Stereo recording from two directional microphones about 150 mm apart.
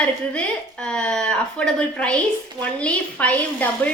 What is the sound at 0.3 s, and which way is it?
A woman's voice, 5° left (ahead or behind).